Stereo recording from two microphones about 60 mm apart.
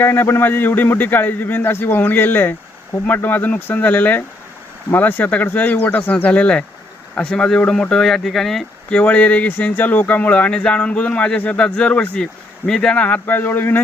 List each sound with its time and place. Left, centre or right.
0.0 s a man's voice: left; by 8.6 s centre
8.9 s speech: left